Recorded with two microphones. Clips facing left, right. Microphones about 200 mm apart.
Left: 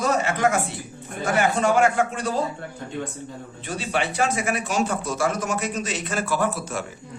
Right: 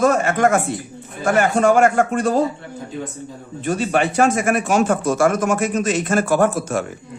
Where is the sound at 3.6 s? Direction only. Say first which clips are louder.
Right 8 dB; 50° right (ahead or behind).